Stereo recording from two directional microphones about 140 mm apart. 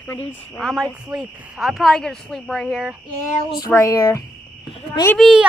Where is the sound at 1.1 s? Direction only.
5° right (ahead or behind).